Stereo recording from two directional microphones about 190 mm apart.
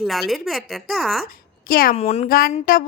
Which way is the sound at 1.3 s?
50° left (ahead or behind).